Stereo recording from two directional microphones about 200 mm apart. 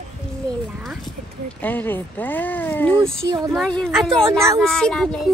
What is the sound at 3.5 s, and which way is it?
A woman's voice, 5° left (ahead or behind).